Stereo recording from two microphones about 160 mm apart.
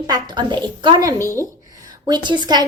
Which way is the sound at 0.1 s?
25° right (ahead or behind).